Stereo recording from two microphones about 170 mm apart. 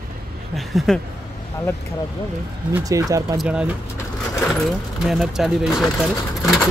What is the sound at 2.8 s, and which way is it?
Speech, 20° right (ahead or behind).